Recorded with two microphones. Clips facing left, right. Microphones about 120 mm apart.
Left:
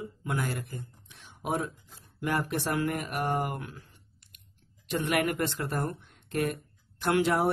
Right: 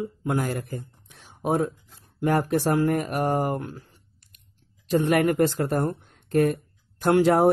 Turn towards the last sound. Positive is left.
turn(degrees=-40)  # may be behind; listen again after turning